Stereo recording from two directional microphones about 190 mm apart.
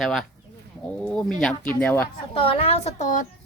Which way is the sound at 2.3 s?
30° left (ahead or behind).